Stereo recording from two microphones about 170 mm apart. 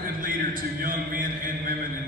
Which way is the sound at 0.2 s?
55° right (ahead or behind).